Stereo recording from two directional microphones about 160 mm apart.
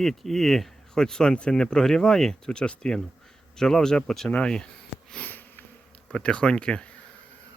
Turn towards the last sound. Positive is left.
turn(degrees=5)  # may be behind; listen again after turning